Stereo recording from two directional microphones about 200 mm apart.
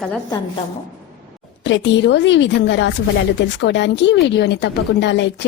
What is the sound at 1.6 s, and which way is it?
A woman's voice, 65° left (ahead or behind).